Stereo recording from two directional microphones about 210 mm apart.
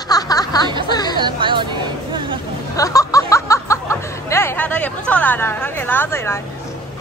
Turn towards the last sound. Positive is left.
turn(degrees=10)  # may be behind; listen again after turning